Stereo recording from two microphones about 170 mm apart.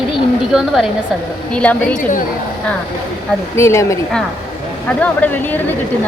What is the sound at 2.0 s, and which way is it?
Speech, 50° left (ahead or behind).